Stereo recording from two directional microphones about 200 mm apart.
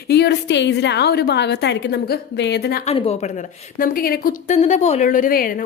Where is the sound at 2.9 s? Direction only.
30° left (ahead or behind).